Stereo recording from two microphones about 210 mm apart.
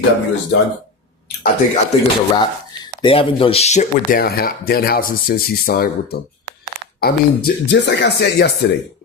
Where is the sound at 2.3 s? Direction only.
20° left (ahead or behind); by 8.5 s 55° left (ahead or behind).